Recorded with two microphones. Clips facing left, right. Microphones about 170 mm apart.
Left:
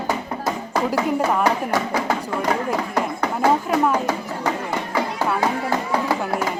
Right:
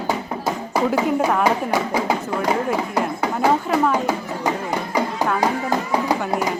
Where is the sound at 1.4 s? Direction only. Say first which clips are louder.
Right 1 dB; 10° right (ahead or behind).